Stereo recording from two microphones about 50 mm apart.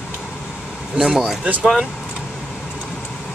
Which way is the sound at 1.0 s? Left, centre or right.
Centre.